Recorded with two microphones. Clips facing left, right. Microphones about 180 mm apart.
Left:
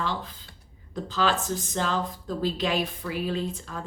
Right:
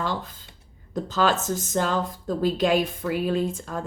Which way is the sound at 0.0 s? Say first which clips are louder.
Right 2 dB; 45° right (ahead or behind).